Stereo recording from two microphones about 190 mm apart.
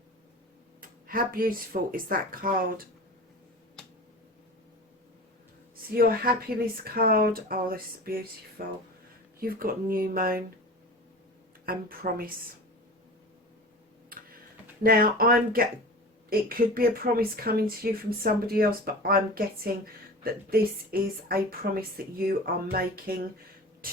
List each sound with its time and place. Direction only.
0.8 s a woman's voice: 50° right (ahead or behind)
5.9 s a woman's voice: 50° right (ahead or behind)
11.6 s a woman's voice: 50° right (ahead or behind)
14.1 s tick-tock: 50° right (ahead or behind)
14.8 s a woman's voice: 50° right (ahead or behind)